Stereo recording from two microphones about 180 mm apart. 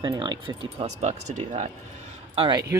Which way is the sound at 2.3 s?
30° right (ahead or behind).